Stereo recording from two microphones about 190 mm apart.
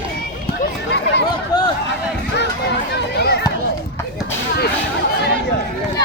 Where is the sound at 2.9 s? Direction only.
60° left (ahead or behind).